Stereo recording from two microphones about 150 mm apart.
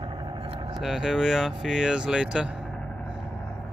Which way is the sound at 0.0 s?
35° right (ahead or behind).